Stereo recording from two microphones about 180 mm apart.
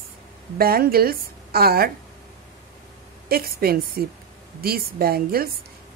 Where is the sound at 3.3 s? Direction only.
55° right (ahead or behind).